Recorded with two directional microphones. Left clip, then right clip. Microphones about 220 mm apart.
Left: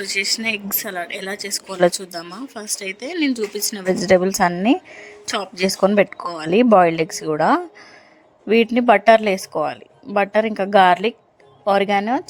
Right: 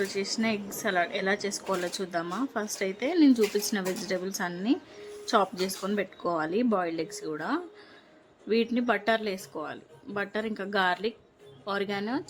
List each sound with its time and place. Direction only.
0.1 s a woman's voice: 40° left (ahead or behind)
0.8 s a woman's voice: centre (ahead or behind)
1.4 s a woman's voice: 40° left (ahead or behind)
2.3 s a woman's voice: centre (ahead or behind)
2.6 s a woman's voice: 35° left (ahead or behind)